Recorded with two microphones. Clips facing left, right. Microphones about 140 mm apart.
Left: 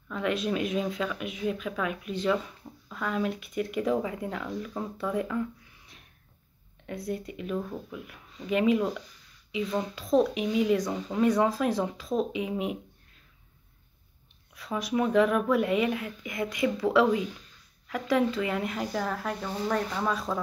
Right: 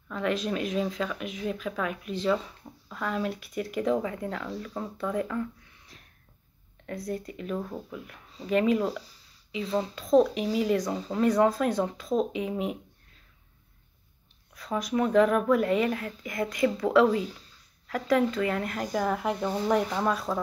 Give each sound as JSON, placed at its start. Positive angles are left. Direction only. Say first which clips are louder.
{"t": 0.1, "sound": "speech", "louder": "even", "side_deg": 0}
{"t": 4.0, "sound": "speech", "louder": "even", "side_deg": 15}
{"t": 7.3, "sound": "speech", "louder": "even", "side_deg": 5}
{"t": 8.8, "sound": "speech", "louder": "even", "side_deg": -35}
{"t": 9.9, "sound": "speech", "louder": "right 3 dB", "side_deg": 5}
{"t": 10.3, "sound": "speech", "louder": "left 1 dB", "side_deg": -35}
{"t": 10.7, "sound": "speech", "louder": "even", "side_deg": 0}
{"t": 14.5, "sound": "speech", "louder": "right 1 dB", "side_deg": 5}
{"t": 17.1, "sound": "speech", "louder": "even", "side_deg": -35}
{"t": 17.8, "sound": "speech", "louder": "right 1 dB", "side_deg": 0}
{"t": 18.9, "sound": "speech", "louder": "right 3 dB", "side_deg": -15}